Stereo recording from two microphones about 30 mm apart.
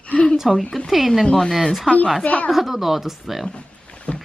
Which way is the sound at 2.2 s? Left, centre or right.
Left.